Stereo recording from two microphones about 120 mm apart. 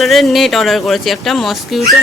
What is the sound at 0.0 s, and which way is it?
Speech, centre (ahead or behind).